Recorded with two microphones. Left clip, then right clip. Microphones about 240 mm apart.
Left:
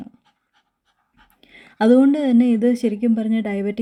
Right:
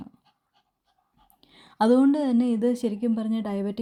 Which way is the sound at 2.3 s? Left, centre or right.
Centre.